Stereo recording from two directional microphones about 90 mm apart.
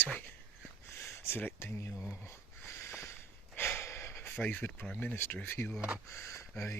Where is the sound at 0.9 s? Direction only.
30° left (ahead or behind).